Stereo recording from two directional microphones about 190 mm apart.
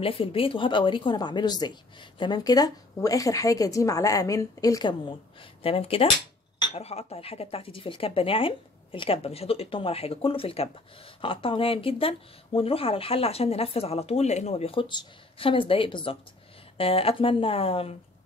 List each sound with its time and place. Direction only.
0.0 s speech: 30° left (ahead or behind)
5.6 s speech: 30° left (ahead or behind)